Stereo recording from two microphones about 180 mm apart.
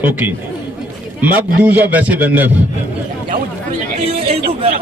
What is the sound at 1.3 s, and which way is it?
A man's voice, 10° right (ahead or behind).